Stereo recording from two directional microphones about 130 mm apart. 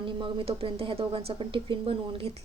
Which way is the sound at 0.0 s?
40° right (ahead or behind).